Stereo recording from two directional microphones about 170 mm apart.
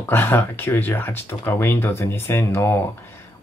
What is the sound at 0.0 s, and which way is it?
Speech, 15° left (ahead or behind).